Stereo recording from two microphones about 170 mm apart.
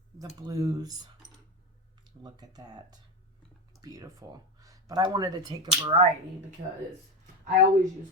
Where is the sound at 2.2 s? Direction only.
25° right (ahead or behind).